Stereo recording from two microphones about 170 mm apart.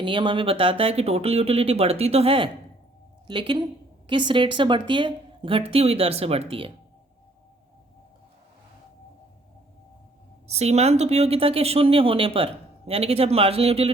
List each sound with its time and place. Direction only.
0.0 s a woman's voice: 30° right (ahead or behind)
10.5 s speech: 40° right (ahead or behind)